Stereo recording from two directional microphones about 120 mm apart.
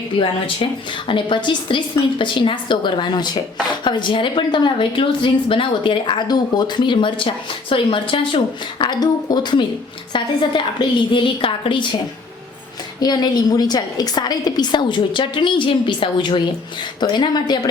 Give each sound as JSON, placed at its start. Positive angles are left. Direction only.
{"t": 0.2, "sound": "a woman's voice", "side_deg": 45}
{"t": 13.0, "sound": "a woman's voice", "side_deg": 35}